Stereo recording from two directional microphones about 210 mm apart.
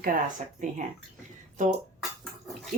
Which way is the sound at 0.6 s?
35° right (ahead or behind).